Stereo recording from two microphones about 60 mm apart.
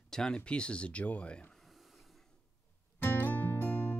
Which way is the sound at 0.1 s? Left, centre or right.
Centre.